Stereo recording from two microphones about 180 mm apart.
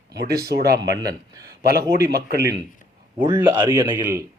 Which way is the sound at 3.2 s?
25° right (ahead or behind).